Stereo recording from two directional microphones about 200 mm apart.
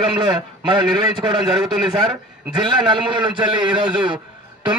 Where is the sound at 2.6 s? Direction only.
25° right (ahead or behind).